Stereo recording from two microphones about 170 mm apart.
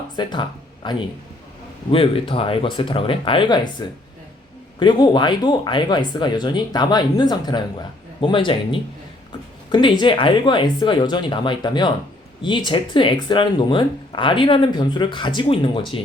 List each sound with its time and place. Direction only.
0.2 s speech: 25° left (ahead or behind)